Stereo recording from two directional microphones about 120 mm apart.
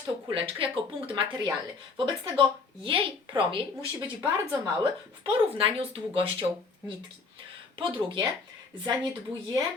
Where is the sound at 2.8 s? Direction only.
45° right (ahead or behind).